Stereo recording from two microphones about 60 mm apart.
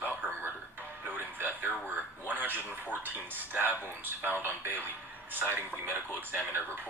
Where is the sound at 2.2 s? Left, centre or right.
Right.